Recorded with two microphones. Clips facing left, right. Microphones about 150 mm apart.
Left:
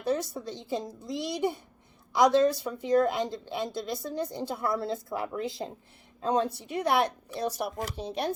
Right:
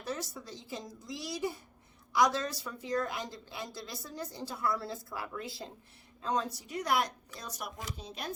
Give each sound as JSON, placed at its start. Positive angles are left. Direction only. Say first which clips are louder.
{"t": 0.0, "sound": "a woman's voice", "louder": "left 9 dB", "side_deg": 20}
{"t": 7.6, "sound": "speech", "louder": "left 10 dB", "side_deg": 40}